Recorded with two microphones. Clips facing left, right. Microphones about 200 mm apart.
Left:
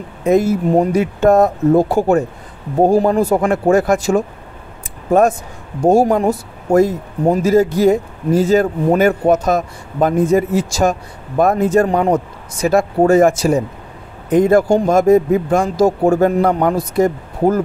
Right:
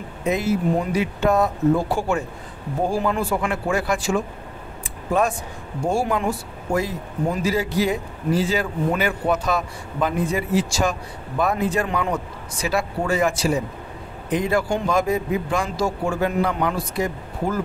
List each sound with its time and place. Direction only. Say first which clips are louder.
0.2 s a man's voice: left 8 dB; 45° left (ahead or behind)
5.9 s a man's voice: left 10 dB; 40° left (ahead or behind)